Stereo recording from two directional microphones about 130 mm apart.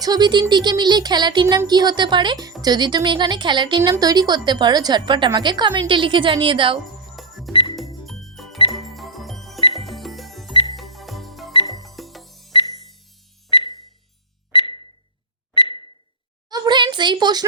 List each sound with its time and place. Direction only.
0.0 s speech: 30° right (ahead or behind)
7.2 s music: centre (ahead or behind)
7.5 s music: 40° left (ahead or behind)
8.0 s music: centre (ahead or behind)
8.8 s jingle: centre (ahead or behind)
9.7 s music: centre (ahead or behind)
10.5 s music: 40° left (ahead or behind)
10.8 s music: centre (ahead or behind)
11.5 s music: 35° left (ahead or behind)
11.8 s music: centre (ahead or behind)
12.5 s music: 35° left (ahead or behind)
15.5 s a sound: 40° left (ahead or behind)
16.5 s a sound: 35° right (ahead or behind)